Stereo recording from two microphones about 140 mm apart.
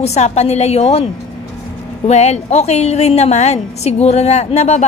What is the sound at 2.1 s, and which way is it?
A woman's voice, 50° left (ahead or behind).